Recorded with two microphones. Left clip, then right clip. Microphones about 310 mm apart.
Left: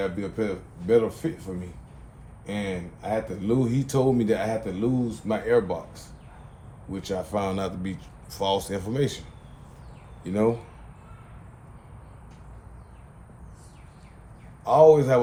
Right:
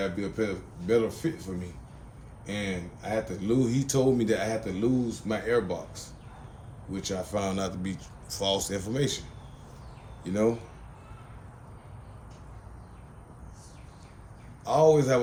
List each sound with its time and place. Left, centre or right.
0.0 s speech: left
10.2 s speech: left
14.6 s a man's voice: left